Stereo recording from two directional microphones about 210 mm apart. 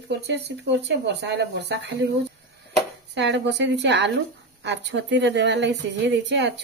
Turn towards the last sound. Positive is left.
turn(degrees=-55)  # may be behind; listen again after turning